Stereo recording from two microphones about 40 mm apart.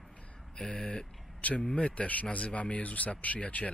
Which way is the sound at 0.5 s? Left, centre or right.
Left.